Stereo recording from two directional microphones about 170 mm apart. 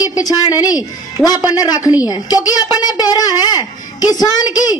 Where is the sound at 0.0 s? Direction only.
20° left (ahead or behind).